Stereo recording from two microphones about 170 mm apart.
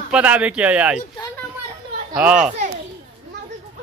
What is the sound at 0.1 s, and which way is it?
Speech, 10° right (ahead or behind).